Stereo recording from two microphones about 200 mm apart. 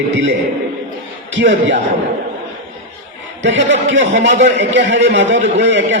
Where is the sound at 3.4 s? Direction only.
65° right (ahead or behind).